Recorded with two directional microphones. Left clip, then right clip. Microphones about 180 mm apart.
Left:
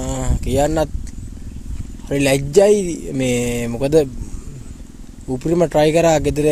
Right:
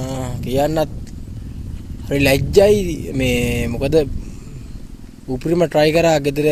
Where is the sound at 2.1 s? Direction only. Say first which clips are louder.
Right 1 dB; 5° left (ahead or behind).